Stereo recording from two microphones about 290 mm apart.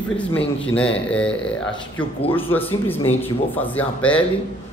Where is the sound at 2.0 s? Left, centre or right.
Centre.